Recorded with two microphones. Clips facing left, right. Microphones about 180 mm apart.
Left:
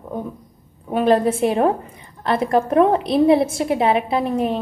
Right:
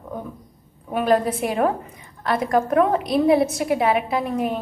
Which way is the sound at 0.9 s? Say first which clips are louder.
Left 3 dB; 25° left (ahead or behind).